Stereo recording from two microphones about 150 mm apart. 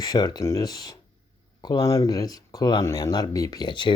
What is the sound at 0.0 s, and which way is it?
Speech, 25° left (ahead or behind).